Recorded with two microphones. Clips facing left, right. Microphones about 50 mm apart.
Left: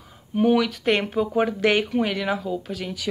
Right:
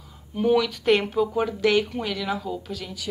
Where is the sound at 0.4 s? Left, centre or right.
Centre.